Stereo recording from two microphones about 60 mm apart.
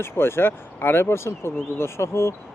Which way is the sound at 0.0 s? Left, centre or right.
Left.